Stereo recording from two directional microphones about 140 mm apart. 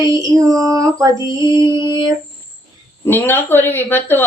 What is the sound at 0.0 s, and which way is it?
Mantra, 25° right (ahead or behind).